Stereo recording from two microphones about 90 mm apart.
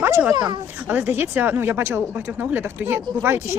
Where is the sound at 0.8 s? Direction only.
20° right (ahead or behind).